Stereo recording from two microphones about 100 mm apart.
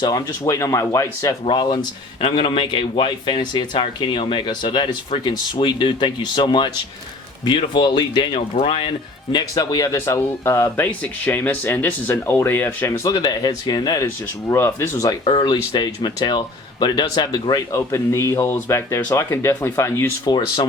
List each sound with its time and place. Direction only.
0.4 s speech: 35° left (ahead or behind)
1.5 s a man's voice: 50° left (ahead or behind)
9.3 s speech: 40° left (ahead or behind); by 13.0 s 25° left (ahead or behind)
13.1 s speech: 40° left (ahead or behind); by 15.0 s 25° left (ahead or behind)
15.2 s a man's voice: 60° left (ahead or behind)
17.7 s speech: 30° left (ahead or behind)
20.2 s a man's voice: 45° left (ahead or behind)